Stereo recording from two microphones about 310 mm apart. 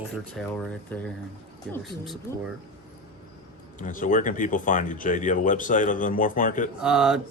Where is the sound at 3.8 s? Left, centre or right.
Left.